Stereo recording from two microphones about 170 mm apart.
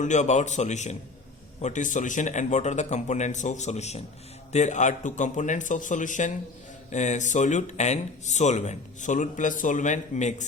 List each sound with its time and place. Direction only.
0.0 s speech: 45° left (ahead or behind)